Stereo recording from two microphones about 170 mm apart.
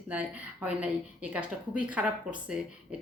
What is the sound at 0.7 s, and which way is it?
Speech, 5° right (ahead or behind).